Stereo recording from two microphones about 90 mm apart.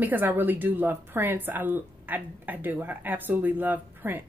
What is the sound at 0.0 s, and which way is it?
A woman's voice, 20° right (ahead or behind).